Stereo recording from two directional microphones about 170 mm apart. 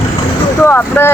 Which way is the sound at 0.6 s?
10° left (ahead or behind).